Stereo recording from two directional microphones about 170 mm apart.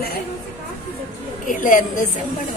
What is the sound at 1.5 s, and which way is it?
Speech, 50° left (ahead or behind).